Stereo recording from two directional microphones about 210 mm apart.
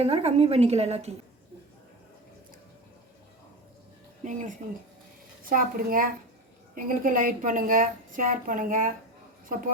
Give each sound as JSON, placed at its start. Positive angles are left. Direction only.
{"t": 0.0, "sound": "a woman's voice", "side_deg": -30}
{"t": 4.2, "sound": "a woman's voice", "side_deg": -35}